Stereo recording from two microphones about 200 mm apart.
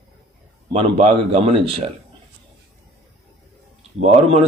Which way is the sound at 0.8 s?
30° right (ahead or behind).